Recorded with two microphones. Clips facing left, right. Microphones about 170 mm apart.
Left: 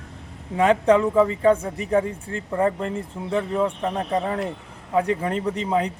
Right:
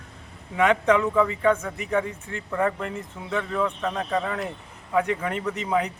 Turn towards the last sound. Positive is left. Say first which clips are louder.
# left 2 dB
turn(degrees=30)  # may be behind; listen again after turning